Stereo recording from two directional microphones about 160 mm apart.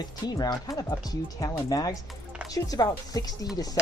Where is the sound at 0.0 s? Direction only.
25° left (ahead or behind).